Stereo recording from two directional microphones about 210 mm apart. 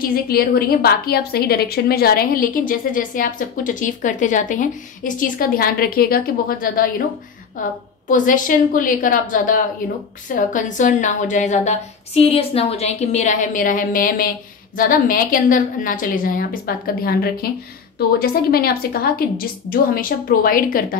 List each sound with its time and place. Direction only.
0.0 s a woman's voice: 45° left (ahead or behind)
8.1 s a woman's voice: 40° left (ahead or behind)